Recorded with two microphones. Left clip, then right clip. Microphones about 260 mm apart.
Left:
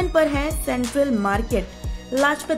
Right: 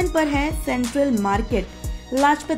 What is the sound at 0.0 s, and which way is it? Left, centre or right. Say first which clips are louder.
Speech: left 1 dB; centre.